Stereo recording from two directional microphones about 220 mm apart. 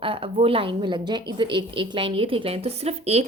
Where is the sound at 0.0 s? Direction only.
25° right (ahead or behind).